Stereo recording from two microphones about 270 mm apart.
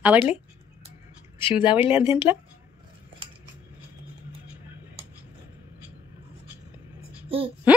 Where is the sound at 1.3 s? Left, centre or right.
Centre.